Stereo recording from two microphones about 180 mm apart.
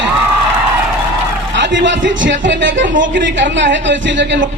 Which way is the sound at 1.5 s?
85° right.